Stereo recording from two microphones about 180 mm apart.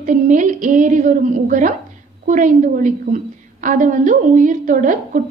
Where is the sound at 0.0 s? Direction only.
45° right (ahead or behind).